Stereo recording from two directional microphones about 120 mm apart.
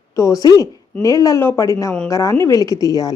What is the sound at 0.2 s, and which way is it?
A woman's voice, 30° left (ahead or behind).